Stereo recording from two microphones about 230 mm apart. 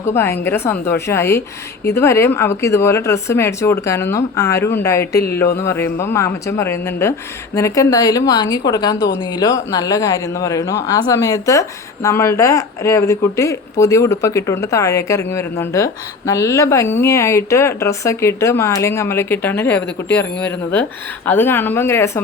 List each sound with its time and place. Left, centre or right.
0.0 s speech: centre